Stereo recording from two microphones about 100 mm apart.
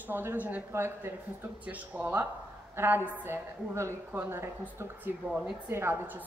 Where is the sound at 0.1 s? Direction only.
20° right (ahead or behind).